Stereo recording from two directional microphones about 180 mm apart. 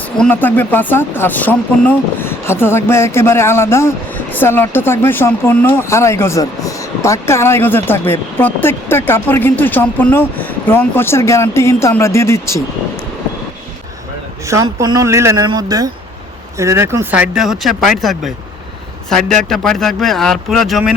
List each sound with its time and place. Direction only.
0.2 s speech: 10° left (ahead or behind)
14.4 s speech: 15° right (ahead or behind); by 20.9 s centre (ahead or behind)